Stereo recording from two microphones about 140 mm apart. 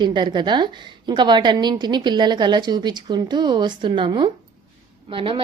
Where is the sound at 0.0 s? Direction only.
30° right (ahead or behind).